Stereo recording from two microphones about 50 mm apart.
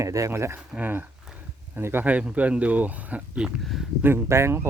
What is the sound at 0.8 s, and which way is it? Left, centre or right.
Speech, right.